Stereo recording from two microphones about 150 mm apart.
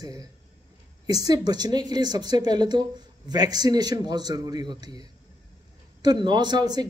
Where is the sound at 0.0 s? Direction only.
25° right (ahead or behind).